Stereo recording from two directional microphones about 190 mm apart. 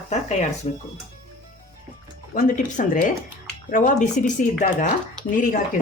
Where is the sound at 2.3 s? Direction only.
45° left (ahead or behind).